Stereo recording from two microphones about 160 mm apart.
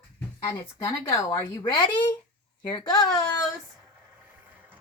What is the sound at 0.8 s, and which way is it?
Speech, 20° left (ahead or behind).